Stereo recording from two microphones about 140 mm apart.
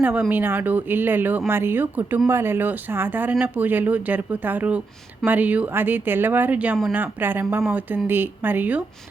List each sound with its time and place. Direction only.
0.0 s speech: 10° right (ahead or behind)